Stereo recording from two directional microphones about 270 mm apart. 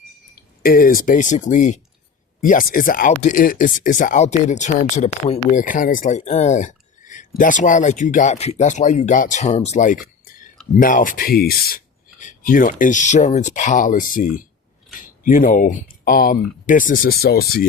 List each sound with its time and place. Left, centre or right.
0.6 s speech: left